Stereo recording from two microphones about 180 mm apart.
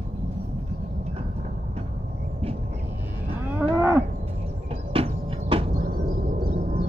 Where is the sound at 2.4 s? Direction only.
35° right (ahead or behind).